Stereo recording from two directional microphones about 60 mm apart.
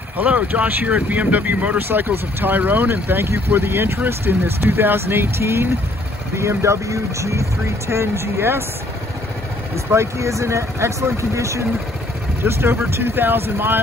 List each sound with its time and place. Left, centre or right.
0.2 s speech: right
7.9 s speech: right
9.8 s speech: right
12.4 s speech: right